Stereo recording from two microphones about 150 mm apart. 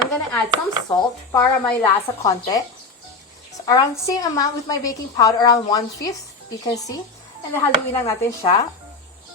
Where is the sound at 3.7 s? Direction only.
25° left (ahead or behind).